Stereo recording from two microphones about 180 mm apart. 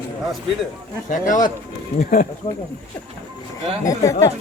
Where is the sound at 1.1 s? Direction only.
45° left (ahead or behind).